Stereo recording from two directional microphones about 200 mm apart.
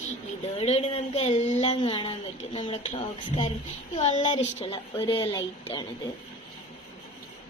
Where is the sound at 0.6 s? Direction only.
30° left (ahead or behind).